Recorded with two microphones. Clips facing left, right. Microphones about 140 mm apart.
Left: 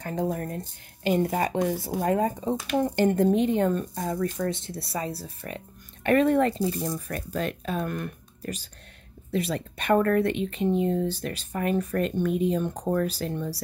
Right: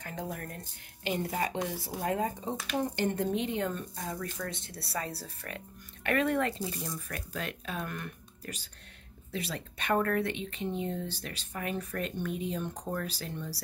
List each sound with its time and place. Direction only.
0.0 s speech: 30° left (ahead or behind)
1.0 s speech: 45° left (ahead or behind)
4.7 s speech: 20° left (ahead or behind)
6.0 s speech: 35° left (ahead or behind)